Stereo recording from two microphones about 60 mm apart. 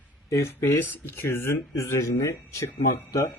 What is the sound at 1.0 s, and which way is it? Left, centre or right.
Speech, left.